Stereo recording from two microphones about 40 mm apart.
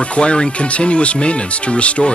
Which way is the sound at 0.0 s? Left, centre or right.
Left.